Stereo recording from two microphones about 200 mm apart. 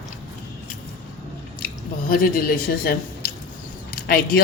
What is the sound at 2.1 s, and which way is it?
Speech, 50° left (ahead or behind).